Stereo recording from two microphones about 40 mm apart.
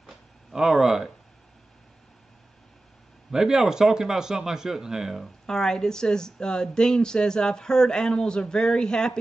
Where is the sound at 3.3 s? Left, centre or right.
Centre.